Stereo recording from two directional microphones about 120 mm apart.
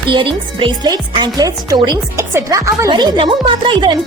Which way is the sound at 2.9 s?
40° right (ahead or behind).